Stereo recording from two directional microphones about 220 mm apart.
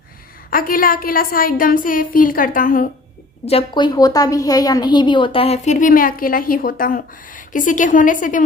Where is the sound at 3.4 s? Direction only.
25° left (ahead or behind).